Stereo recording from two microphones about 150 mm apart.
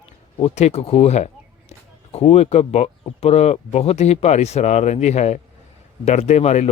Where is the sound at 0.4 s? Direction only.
45° left (ahead or behind).